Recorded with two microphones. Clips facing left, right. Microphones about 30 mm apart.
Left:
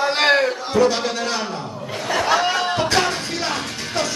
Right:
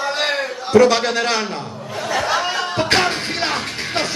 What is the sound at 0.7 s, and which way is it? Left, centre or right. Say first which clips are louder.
Speech: right 6 dB; right.